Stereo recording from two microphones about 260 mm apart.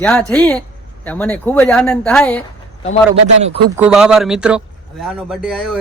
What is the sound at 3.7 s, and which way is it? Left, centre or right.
Speech, centre.